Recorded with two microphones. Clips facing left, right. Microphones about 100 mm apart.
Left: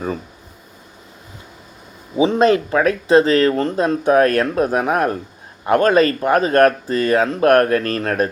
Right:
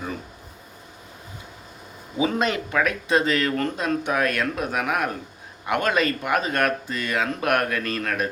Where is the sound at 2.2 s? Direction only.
30° left (ahead or behind).